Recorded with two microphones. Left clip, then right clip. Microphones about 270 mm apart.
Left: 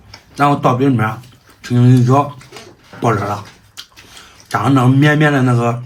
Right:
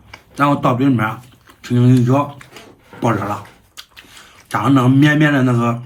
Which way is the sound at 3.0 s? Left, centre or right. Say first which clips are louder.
Left 2 dB; centre.